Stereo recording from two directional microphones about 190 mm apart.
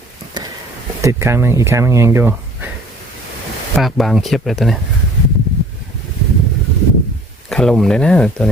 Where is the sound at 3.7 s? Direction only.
Centre (ahead or behind).